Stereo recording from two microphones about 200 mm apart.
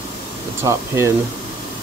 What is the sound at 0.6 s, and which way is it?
Speech, 15° right (ahead or behind).